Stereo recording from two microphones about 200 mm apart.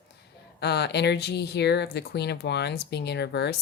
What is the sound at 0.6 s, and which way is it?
Speech, 55° left (ahead or behind).